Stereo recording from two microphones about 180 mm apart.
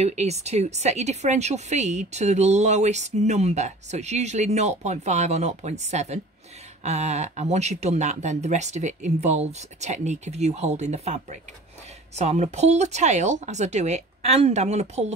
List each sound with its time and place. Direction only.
0.0 s a woman's voice: 35° right (ahead or behind)